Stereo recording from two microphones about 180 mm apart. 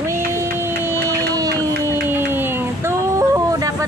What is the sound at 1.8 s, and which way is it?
Yodeling, 10° right (ahead or behind).